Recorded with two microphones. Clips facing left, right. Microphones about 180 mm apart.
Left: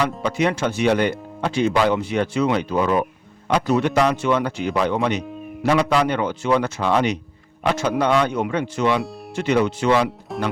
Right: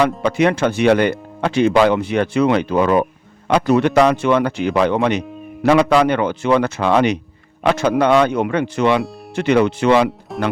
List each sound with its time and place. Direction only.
0.2 s speech: 65° right (ahead or behind)
10.3 s music: centre (ahead or behind)